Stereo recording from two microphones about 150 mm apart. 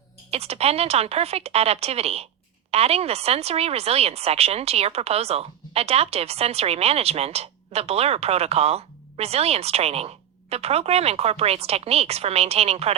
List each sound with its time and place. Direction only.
0.3 s speech: 45° right (ahead or behind)